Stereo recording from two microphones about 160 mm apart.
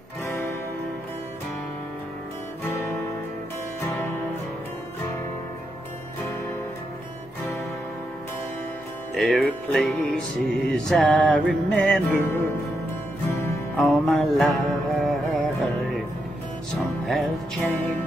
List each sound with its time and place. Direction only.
0.3 s music: 15° left (ahead or behind)
9.1 s music: centre (ahead or behind)
13.7 s music: centre (ahead or behind)
17.1 s music: centre (ahead or behind)